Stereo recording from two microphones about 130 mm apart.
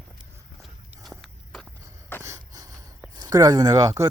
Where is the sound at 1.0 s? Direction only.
Centre (ahead or behind).